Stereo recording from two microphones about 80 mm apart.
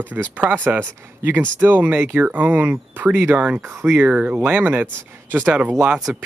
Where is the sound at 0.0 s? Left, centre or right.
Right.